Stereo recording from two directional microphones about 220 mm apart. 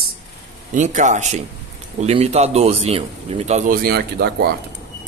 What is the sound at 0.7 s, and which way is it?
Speech, 35° right (ahead or behind).